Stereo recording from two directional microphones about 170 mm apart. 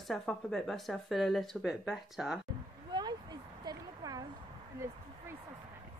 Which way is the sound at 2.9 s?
25° right (ahead or behind).